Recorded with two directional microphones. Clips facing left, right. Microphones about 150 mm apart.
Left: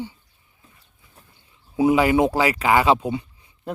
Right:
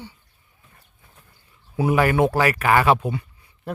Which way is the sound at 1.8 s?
15° left (ahead or behind).